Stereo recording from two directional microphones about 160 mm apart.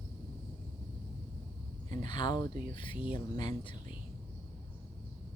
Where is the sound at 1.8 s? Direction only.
30° left (ahead or behind).